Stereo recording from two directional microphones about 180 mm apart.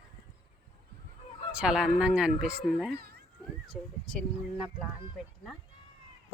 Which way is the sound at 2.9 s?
60° right (ahead or behind).